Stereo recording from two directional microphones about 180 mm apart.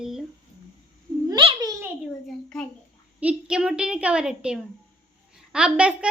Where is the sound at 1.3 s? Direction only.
25° right (ahead or behind).